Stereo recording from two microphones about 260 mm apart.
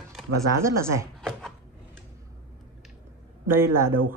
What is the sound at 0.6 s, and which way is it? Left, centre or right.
Speech, centre.